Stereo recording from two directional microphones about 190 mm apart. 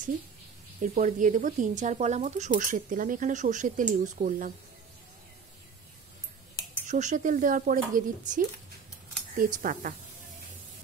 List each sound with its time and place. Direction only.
0.9 s speech: 45° right (ahead or behind)
6.9 s speech: 40° right (ahead or behind)